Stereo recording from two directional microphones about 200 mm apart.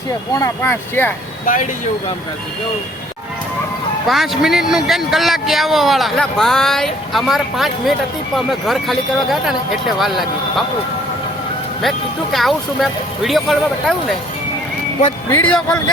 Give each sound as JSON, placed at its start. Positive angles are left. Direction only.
{"t": 0.3, "sound": "speech", "side_deg": 10}
{"t": 1.5, "sound": "speech", "side_deg": 40}
{"t": 4.0, "sound": "a man's voice", "side_deg": 0}
{"t": 11.8, "sound": "a man's voice", "side_deg": 0}
{"t": 15.3, "sound": "speech", "side_deg": 10}